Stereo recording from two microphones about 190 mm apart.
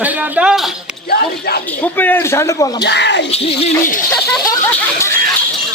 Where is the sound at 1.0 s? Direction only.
55° left (ahead or behind).